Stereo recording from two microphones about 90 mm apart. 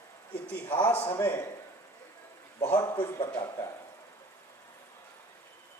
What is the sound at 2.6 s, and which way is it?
Speech, 30° left (ahead or behind).